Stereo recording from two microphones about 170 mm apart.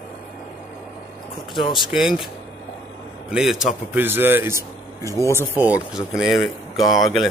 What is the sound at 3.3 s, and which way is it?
A man's voice, 5° right (ahead or behind).